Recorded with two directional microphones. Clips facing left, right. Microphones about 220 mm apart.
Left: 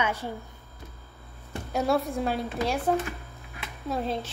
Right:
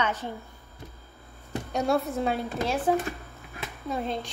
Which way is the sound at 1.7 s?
Centre (ahead or behind).